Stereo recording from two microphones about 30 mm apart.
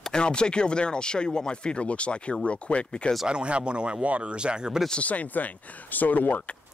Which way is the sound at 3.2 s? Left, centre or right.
Right.